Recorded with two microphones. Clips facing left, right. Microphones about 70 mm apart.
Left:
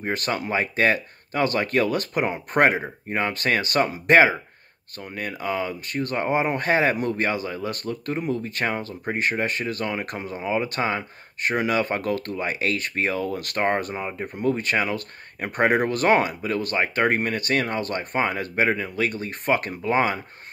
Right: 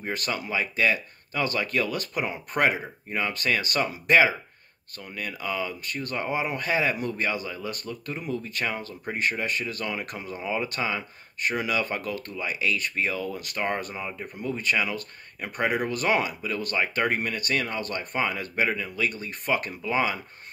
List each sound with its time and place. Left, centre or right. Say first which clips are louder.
0.0 s speech: left 4 dB; left
10.4 s speech: left 4 dB; left
10.7 s speech: left 4 dB; left
12.0 s speech: left 6 dB; left